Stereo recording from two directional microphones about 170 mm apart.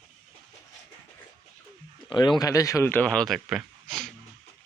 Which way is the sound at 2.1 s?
25° left (ahead or behind).